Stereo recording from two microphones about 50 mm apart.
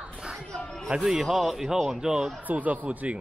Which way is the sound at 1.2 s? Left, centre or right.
Centre.